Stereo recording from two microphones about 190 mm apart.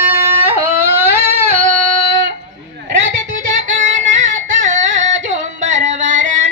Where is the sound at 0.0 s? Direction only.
10° right (ahead or behind).